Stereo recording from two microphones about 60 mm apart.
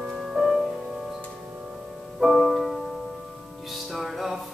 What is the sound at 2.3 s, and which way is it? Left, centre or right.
Music, centre.